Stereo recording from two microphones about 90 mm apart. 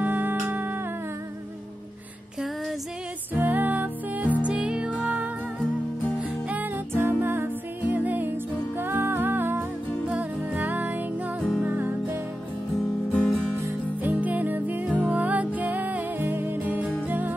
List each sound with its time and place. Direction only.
0.0 s music: 20° right (ahead or behind)
3.3 s music: 20° right (ahead or behind)
12.7 s music: 10° left (ahead or behind)
14.1 s music: 15° right (ahead or behind)